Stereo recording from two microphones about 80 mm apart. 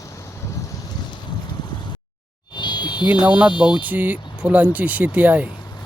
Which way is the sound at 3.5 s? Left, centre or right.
Left.